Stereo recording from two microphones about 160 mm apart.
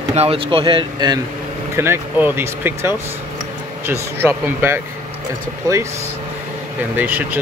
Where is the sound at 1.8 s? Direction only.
15° right (ahead or behind).